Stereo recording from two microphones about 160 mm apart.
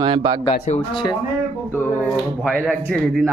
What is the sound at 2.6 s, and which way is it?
Speech, 5° left (ahead or behind).